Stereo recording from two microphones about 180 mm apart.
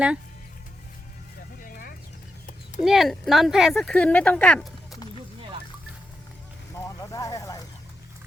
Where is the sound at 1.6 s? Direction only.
50° left (ahead or behind).